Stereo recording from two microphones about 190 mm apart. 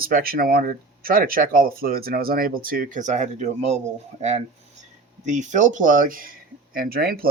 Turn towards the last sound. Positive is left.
turn(degrees=-50)  # may be behind; listen again after turning